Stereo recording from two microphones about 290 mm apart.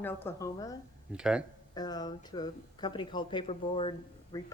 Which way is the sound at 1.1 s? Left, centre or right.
Centre.